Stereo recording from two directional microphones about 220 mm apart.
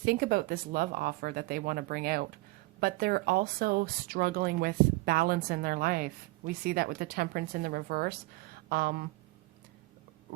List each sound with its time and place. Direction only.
0.0 s speech: 45° right (ahead or behind)